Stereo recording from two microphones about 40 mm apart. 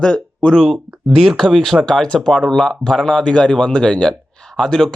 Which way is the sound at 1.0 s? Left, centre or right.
Centre.